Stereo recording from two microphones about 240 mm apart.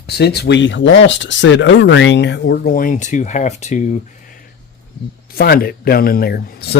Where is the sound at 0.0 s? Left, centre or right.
Left.